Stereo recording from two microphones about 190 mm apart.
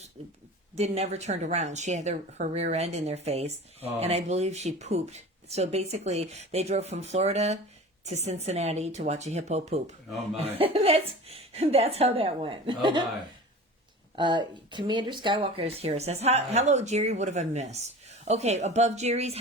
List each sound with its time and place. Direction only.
0.8 s speech: 35° right (ahead or behind)
14.2 s speech: 25° right (ahead or behind)